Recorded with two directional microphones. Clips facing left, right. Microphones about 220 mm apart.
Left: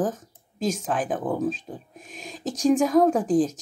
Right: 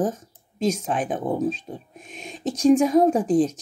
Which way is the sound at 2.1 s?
45° left (ahead or behind).